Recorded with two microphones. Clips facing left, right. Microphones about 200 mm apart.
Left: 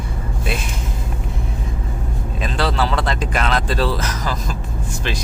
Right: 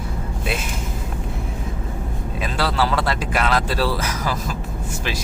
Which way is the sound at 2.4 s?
5° right (ahead or behind).